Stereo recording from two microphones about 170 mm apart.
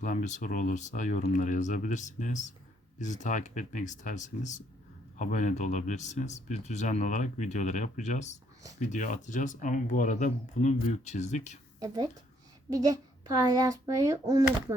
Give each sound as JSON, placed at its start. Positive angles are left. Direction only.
{"t": 0.0, "sound": "speech", "side_deg": 50}
{"t": 12.7, "sound": "a child's voice", "side_deg": -20}